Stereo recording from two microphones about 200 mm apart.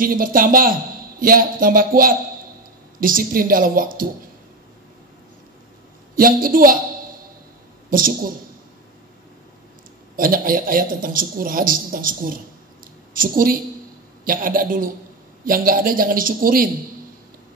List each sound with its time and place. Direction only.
0.0 s a man's voice: 45° right (ahead or behind)
6.1 s a man's voice: 45° right (ahead or behind)
7.9 s a man's voice: 45° right (ahead or behind)
10.1 s a man's voice: 45° right (ahead or behind)